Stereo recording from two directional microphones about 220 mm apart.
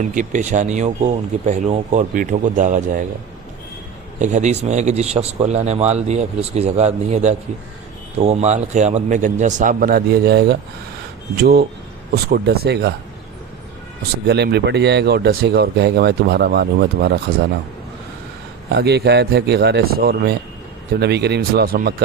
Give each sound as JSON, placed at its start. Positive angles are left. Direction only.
{"t": 0.1, "sound": "a man's voice", "side_deg": -35}
{"t": 4.2, "sound": "a man's voice", "side_deg": -35}
{"t": 12.1, "sound": "speech", "side_deg": -45}
{"t": 14.3, "sound": "speech", "side_deg": -50}
{"t": 18.7, "sound": "speech", "side_deg": -50}